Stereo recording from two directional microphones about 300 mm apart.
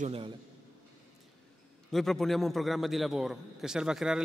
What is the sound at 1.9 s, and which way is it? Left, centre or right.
A man's voice, centre.